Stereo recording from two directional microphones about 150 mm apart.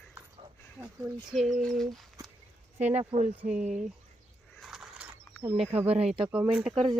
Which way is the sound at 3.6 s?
50° right (ahead or behind).